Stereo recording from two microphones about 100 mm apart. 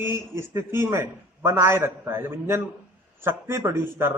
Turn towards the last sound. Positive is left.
turn(degrees=-25)  # may be behind; listen again after turning